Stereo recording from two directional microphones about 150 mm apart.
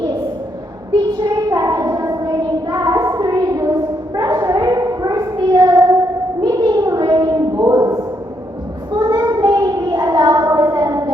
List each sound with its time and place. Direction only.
1.2 s child singing: 25° right (ahead or behind)
6.4 s a sound: 25° right (ahead or behind)
8.9 s child singing: 30° right (ahead or behind)